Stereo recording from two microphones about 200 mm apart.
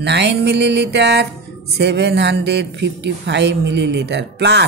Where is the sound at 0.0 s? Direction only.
60° right (ahead or behind).